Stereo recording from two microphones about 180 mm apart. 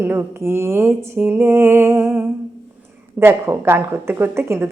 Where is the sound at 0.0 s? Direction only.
10° right (ahead or behind).